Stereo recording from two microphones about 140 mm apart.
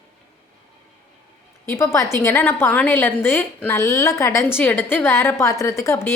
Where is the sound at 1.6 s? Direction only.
20° left (ahead or behind).